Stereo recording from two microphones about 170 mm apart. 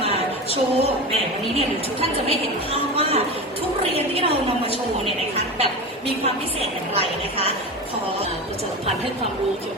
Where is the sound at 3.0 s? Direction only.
35° right (ahead or behind).